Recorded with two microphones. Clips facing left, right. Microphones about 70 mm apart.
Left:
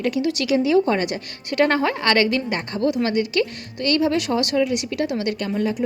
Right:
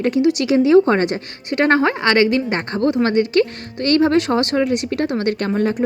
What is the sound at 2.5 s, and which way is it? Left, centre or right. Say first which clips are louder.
A woman's voice: right 3 dB; right.